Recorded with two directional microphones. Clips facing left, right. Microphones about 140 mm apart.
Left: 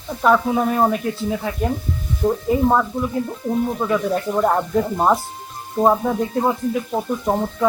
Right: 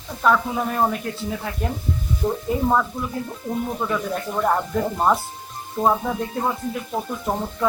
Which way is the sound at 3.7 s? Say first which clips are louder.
Left 5 dB; 5° left (ahead or behind).